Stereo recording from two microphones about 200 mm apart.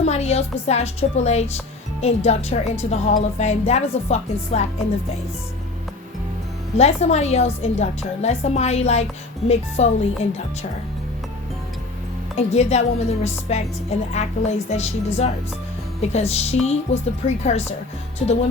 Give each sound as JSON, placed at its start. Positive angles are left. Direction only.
{"t": 0.0, "sound": "a woman's voice", "side_deg": 35}
{"t": 6.7, "sound": "a woman's voice", "side_deg": 35}
{"t": 12.4, "sound": "a woman's voice", "side_deg": 35}